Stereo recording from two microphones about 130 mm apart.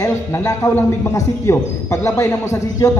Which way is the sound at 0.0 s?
20° left (ahead or behind).